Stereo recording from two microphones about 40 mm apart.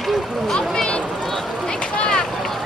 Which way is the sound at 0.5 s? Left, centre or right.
Left.